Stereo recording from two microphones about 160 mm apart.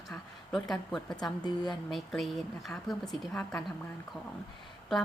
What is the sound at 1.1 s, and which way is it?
Speech, 25° left (ahead or behind).